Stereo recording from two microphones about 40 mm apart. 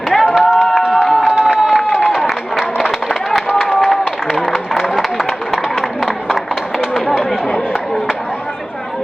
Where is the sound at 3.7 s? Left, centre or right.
Centre.